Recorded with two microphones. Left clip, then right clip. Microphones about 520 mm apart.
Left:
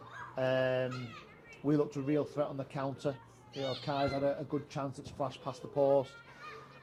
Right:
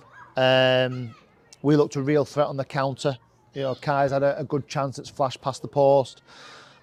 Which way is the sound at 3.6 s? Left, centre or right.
Right.